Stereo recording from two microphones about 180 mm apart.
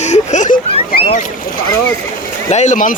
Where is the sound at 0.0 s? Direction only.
40° left (ahead or behind).